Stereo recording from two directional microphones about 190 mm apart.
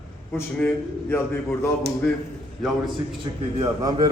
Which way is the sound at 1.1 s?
10° left (ahead or behind).